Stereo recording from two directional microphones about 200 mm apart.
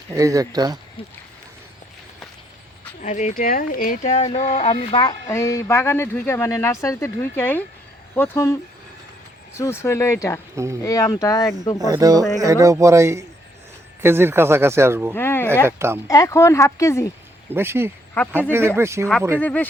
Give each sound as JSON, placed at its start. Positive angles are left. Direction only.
{"t": 0.1, "sound": "speech", "side_deg": -15}
{"t": 1.0, "sound": "speech", "side_deg": 25}
{"t": 3.0, "sound": "speech", "side_deg": 35}
{"t": 5.3, "sound": "speech", "side_deg": 15}
{"t": 9.6, "sound": "speech", "side_deg": 15}
{"t": 10.5, "sound": "speech", "side_deg": -15}
{"t": 10.8, "sound": "speech", "side_deg": 15}
{"t": 11.8, "sound": "speech", "side_deg": -15}
{"t": 15.1, "sound": "speech", "side_deg": 10}
{"t": 15.6, "sound": "speech", "side_deg": -10}
{"t": 16.0, "sound": "speech", "side_deg": 15}
{"t": 17.5, "sound": "speech", "side_deg": -10}
{"t": 19.4, "sound": "speech", "side_deg": 10}